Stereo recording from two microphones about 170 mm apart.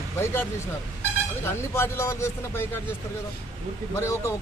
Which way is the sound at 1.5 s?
15° left (ahead or behind).